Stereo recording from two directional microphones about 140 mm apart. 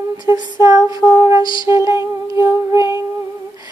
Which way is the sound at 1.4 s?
35° left (ahead or behind).